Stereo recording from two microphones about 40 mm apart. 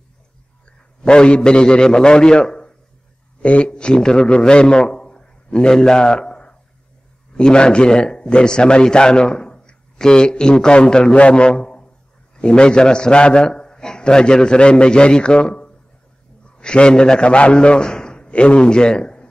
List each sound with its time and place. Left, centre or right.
1.0 s a man's voice: left